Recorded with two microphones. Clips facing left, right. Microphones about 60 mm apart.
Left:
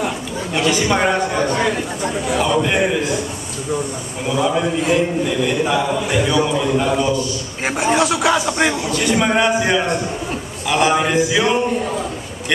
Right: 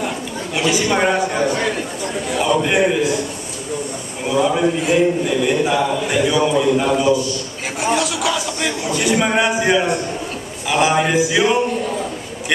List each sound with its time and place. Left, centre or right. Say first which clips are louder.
0.6 s a man's voice: even; centre
2.2 s a man's voice: even; centre
4.3 s a man's voice: right 2 dB; centre
7.8 s a man's voice: left 2 dB; left
8.9 s a man's voice: right 3 dB; centre